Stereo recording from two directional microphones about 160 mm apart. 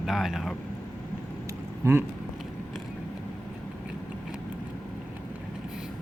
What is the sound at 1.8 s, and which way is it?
Speech, 15° right (ahead or behind).